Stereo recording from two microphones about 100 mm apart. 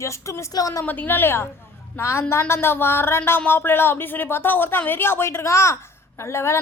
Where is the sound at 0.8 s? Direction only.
20° left (ahead or behind).